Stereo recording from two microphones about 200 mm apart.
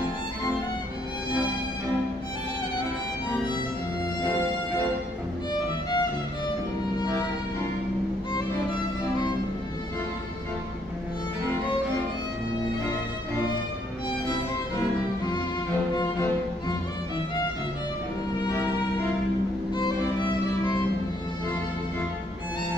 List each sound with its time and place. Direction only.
5.5 s music: 20° left (ahead or behind)
16.0 s music: 20° left (ahead or behind)
18.4 s music: 15° left (ahead or behind)